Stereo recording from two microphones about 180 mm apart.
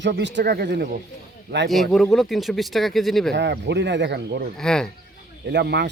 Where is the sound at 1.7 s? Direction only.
Centre (ahead or behind).